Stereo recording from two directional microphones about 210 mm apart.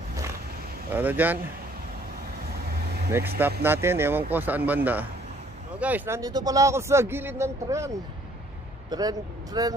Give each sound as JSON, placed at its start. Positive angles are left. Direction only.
{"t": 0.9, "sound": "a man's voice", "side_deg": -10}
{"t": 3.1, "sound": "a man's voice", "side_deg": -10}
{"t": 8.9, "sound": "a man's voice", "side_deg": -20}